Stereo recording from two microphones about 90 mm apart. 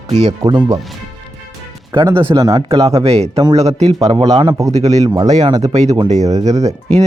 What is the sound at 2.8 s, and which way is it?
Speech, 90° right.